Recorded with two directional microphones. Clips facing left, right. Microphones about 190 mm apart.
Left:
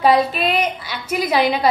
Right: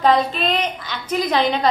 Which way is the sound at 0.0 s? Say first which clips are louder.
Left 2 dB; 10° left (ahead or behind).